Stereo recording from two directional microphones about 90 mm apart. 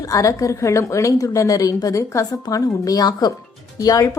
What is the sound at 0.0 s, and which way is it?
A woman's voice, 40° left (ahead or behind).